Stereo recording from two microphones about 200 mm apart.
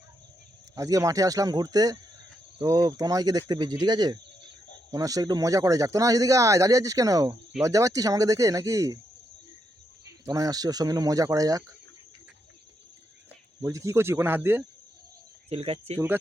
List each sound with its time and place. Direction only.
0.8 s speech: 15° right (ahead or behind)
10.2 s speech: 20° right (ahead or behind)
13.6 s speech: 15° right (ahead or behind)
15.4 s speech: 30° right (ahead or behind)